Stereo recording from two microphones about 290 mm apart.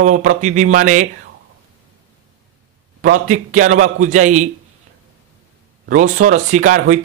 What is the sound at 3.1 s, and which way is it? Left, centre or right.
Speech, right.